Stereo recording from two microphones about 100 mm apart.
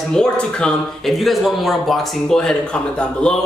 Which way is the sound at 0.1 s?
5° left (ahead or behind).